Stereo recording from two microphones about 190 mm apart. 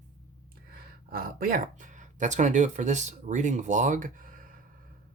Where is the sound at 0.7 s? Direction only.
50° right (ahead or behind).